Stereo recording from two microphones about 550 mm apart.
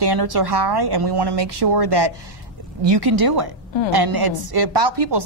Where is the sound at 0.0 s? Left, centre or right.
Right.